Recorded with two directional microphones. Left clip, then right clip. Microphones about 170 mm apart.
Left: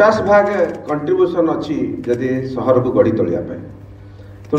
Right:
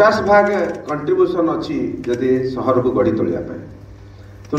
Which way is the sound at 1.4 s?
50° left (ahead or behind).